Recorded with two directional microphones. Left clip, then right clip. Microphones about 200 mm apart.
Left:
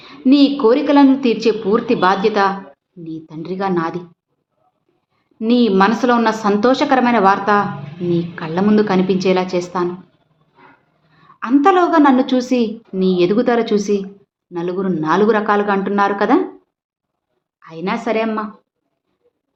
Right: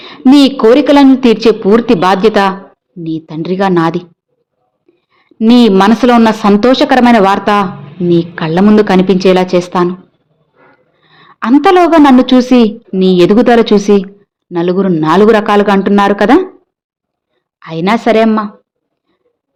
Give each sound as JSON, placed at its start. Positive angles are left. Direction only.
{"t": 0.0, "sound": "a woman's voice", "side_deg": -40}
{"t": 5.1, "sound": "a woman's voice", "side_deg": -40}
{"t": 11.1, "sound": "a woman's voice", "side_deg": -45}
{"t": 17.6, "sound": "a woman's voice", "side_deg": -45}